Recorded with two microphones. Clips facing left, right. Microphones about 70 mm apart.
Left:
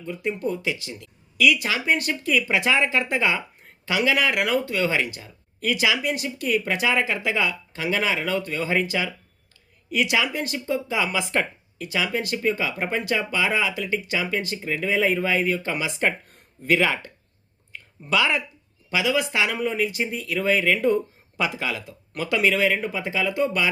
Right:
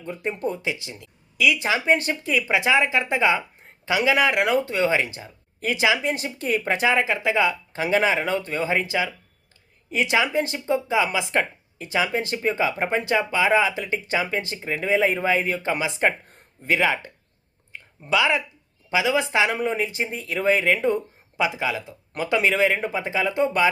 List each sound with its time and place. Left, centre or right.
0.0 s speech: right
17.7 s a sound: right
18.9 s speech: right